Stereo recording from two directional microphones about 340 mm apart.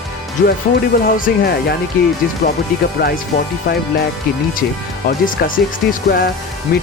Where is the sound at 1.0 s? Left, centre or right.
Left.